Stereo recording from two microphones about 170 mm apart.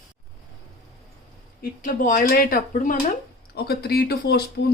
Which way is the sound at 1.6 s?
55° left (ahead or behind).